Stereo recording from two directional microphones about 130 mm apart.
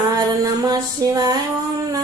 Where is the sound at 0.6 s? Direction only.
30° right (ahead or behind).